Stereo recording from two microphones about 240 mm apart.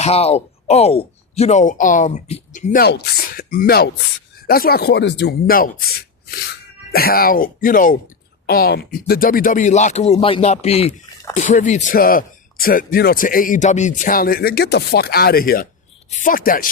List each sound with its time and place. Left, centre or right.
0.0 s speech: left
6.9 s speech: left